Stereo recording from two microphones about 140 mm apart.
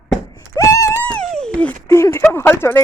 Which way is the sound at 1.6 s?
15° left (ahead or behind).